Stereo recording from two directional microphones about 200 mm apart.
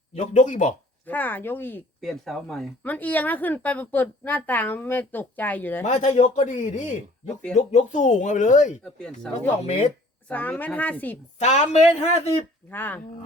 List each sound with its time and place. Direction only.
0.1 s speech: 35° left (ahead or behind)
1.0 s speech: 10° left (ahead or behind)
5.8 s speech: 35° left (ahead or behind)
8.8 s speech: 5° left (ahead or behind)
11.3 s speech: 35° left (ahead or behind)
12.7 s speech: 10° left (ahead or behind)